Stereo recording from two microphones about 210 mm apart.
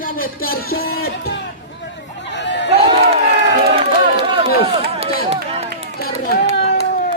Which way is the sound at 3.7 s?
25° right (ahead or behind).